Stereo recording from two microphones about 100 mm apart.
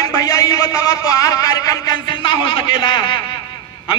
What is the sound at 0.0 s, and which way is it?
A man's voice, 35° left (ahead or behind).